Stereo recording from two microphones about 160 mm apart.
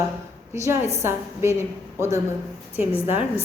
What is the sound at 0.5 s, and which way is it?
A woman's voice, 20° right (ahead or behind).